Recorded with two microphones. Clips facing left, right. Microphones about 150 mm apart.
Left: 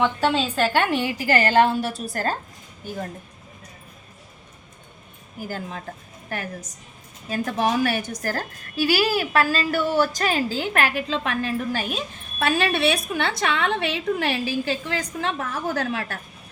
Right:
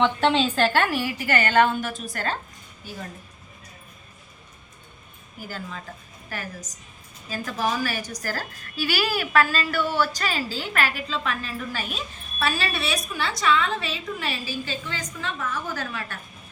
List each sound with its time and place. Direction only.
0.0 s a woman's voice: 5° left (ahead or behind)
0.7 s a woman's voice: 20° left (ahead or behind); by 2.4 s 40° left (ahead or behind)
2.8 s a woman's voice: 50° left (ahead or behind)
5.4 s a woman's voice: 50° left (ahead or behind); by 16.2 s 70° left (ahead or behind)